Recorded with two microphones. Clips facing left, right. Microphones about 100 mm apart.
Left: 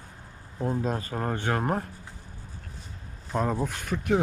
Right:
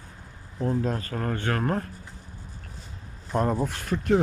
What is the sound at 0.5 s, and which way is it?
Speech, 20° left (ahead or behind).